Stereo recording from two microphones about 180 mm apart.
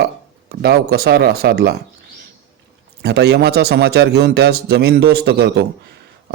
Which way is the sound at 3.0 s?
65° right (ahead or behind).